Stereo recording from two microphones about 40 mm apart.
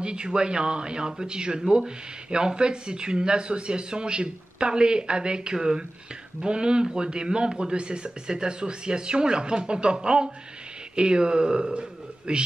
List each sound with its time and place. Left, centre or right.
0.0 s a man's voice: right